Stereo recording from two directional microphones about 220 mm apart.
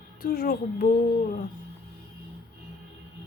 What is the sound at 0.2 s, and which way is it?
Speech, 45° left (ahead or behind).